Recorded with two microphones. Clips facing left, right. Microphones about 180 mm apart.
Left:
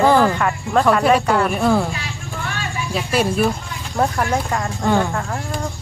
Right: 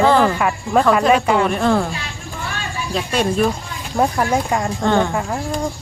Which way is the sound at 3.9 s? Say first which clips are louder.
Right 2 dB; 10° right (ahead or behind).